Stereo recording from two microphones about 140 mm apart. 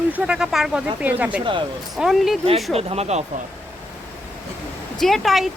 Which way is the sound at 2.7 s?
45° right (ahead or behind).